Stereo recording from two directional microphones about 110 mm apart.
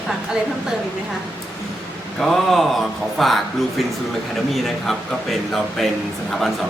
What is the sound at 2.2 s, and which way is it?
Speech, centre (ahead or behind).